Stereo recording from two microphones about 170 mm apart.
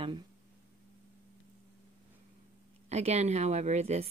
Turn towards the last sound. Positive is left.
turn(degrees=-40)  # may be behind; listen again after turning